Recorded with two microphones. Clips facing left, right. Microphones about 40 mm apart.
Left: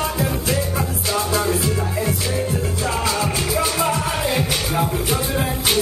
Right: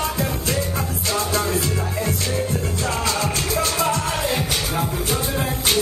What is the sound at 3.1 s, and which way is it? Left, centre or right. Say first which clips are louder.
Music: left 1 dB; centre.